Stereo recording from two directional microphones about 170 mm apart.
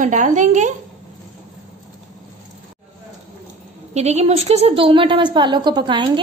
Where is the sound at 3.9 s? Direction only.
40° right (ahead or behind).